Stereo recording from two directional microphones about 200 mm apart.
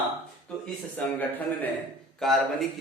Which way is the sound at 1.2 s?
10° left (ahead or behind).